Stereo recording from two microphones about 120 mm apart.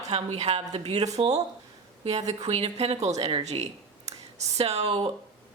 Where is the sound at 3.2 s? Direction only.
45° right (ahead or behind).